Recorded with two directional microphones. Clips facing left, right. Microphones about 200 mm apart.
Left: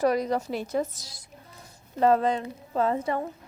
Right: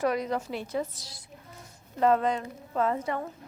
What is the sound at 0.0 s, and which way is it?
A woman's voice, 35° left (ahead or behind).